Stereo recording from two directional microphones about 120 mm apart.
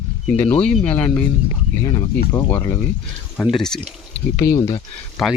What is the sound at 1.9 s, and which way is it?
Speech, 40° left (ahead or behind).